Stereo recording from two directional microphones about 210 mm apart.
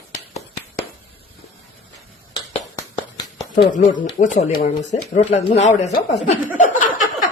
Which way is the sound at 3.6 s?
35° left (ahead or behind).